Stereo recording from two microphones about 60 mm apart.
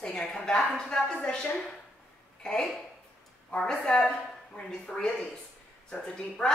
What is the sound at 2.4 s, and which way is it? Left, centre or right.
Speech, centre.